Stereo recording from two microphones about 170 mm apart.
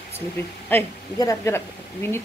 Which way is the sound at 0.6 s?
15° left (ahead or behind).